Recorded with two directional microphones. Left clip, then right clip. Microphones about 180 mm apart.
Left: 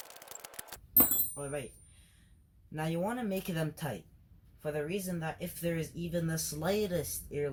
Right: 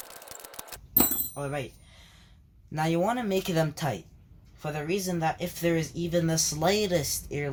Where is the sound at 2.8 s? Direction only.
45° right (ahead or behind).